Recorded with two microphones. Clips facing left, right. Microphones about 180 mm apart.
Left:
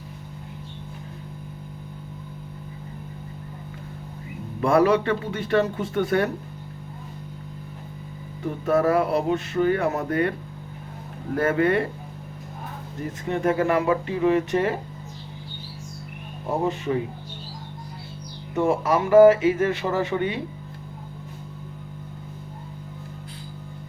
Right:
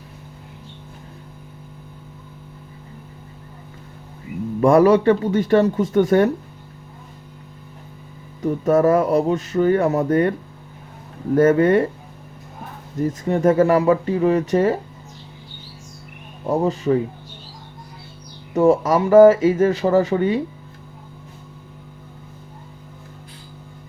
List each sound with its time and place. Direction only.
4.6 s music: 40° right (ahead or behind)
8.4 s music: 40° right (ahead or behind)
11.3 s music: 40° right (ahead or behind)
13.0 s music: 40° right (ahead or behind)
16.5 s music: 35° right (ahead or behind)
18.5 s music: 40° right (ahead or behind)